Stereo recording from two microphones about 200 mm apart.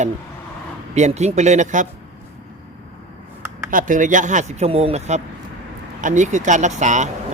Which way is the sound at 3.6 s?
40° right (ahead or behind).